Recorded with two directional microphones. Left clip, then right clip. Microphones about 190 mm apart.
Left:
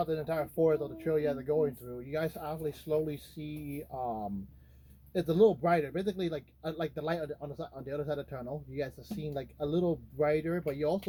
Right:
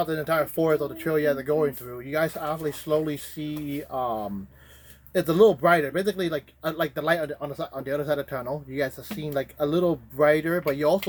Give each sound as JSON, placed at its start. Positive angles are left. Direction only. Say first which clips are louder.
{"t": 0.0, "sound": "speech", "louder": "right 8 dB", "side_deg": -35}